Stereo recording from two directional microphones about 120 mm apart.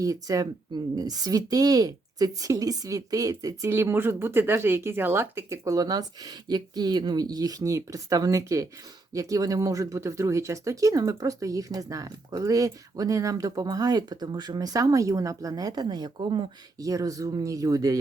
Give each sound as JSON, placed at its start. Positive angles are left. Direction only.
{"t": 0.0, "sound": "a woman's voice", "side_deg": -30}
{"t": 16.8, "sound": "speech", "side_deg": -30}